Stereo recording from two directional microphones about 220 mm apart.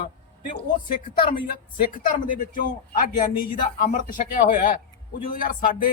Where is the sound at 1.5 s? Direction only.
35° left (ahead or behind).